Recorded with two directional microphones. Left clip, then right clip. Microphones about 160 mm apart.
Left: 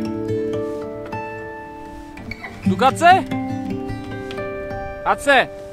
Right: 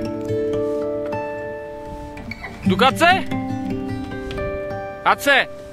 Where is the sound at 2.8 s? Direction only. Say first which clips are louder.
Left 2 dB; 10° right (ahead or behind).